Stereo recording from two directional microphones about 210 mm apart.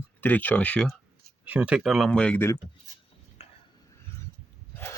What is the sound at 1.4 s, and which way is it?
Speech, 5° right (ahead or behind).